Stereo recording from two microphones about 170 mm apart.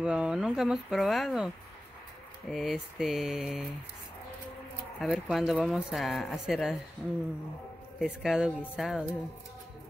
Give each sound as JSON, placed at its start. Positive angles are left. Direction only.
{"t": 0.0, "sound": "speech", "side_deg": -5}
{"t": 2.5, "sound": "speech", "side_deg": 0}
{"t": 5.0, "sound": "speech", "side_deg": -5}
{"t": 8.0, "sound": "speech", "side_deg": -5}